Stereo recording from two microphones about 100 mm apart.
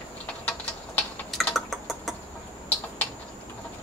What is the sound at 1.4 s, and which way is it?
Typing, centre (ahead or behind).